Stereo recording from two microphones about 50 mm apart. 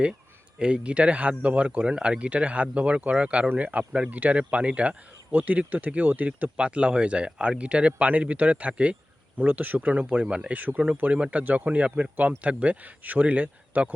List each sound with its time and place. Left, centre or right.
0.6 s a man's voice: right
10.2 s a man's voice: centre
10.5 s a man's voice: right